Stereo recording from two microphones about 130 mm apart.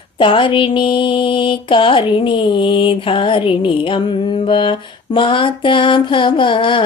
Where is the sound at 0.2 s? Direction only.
40° left (ahead or behind).